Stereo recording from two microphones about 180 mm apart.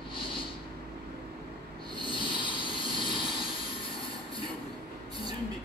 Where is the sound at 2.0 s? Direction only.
25° left (ahead or behind).